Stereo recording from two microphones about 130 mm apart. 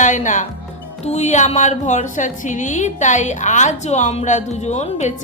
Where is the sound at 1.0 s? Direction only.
60° left (ahead or behind).